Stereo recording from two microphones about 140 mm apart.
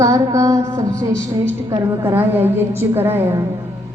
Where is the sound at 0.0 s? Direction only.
20° right (ahead or behind).